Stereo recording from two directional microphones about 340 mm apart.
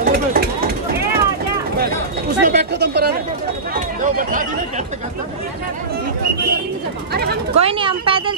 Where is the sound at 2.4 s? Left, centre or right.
Right.